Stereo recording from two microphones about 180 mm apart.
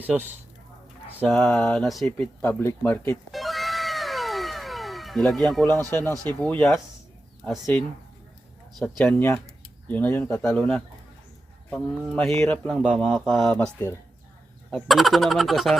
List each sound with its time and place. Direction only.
0.0 s speech: 10° right (ahead or behind)
1.2 s speech: centre (ahead or behind)
3.3 s cat: centre (ahead or behind)
5.6 s speech: 20° right (ahead or behind)
5.9 s speech: 10° left (ahead or behind)
13.6 s speech: 15° left (ahead or behind)
14.7 s speech: centre (ahead or behind)